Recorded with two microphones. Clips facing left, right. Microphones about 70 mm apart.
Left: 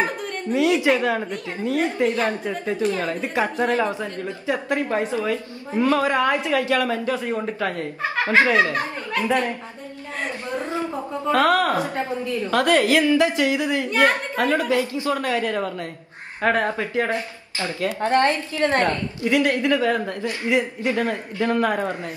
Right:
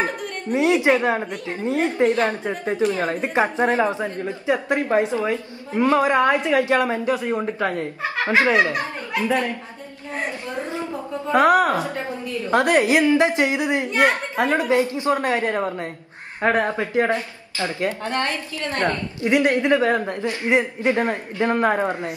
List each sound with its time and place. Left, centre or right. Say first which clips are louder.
0.5 s a woman's voice: right 1 dB; right
11.3 s a woman's voice: right 3 dB; centre
11.8 s a woman's voice: left 2 dB; left
12.4 s a woman's voice: right 1 dB; right
18.0 s a woman's voice: left 6 dB; left
18.8 s a woman's voice: left 1 dB; right